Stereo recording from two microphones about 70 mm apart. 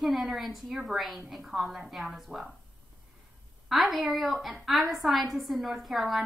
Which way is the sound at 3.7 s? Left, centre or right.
Centre.